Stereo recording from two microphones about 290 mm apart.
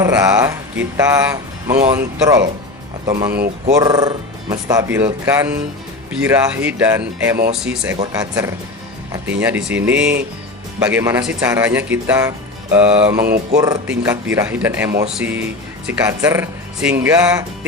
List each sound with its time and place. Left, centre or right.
0.0 s speech: centre
3.3 s speech: right
3.8 s speech: centre
7.9 s speech: centre
13.2 s a sound: right
13.6 s speech: centre